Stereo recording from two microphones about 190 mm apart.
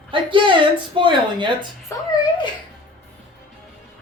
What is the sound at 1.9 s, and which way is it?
Speech, 15° left (ahead or behind).